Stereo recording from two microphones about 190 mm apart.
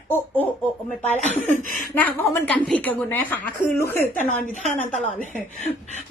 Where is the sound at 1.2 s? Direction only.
40° right (ahead or behind).